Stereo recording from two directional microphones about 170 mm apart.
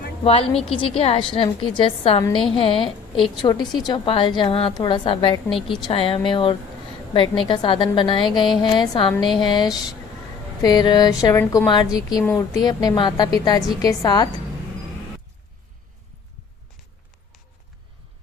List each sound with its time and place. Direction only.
0.3 s a woman's voice: 35° left (ahead or behind)
5.5 s a woman's voice: centre (ahead or behind)
5.8 s a woman's voice: 35° left (ahead or behind)